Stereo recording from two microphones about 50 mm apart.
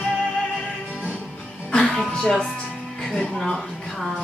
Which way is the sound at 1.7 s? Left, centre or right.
Centre.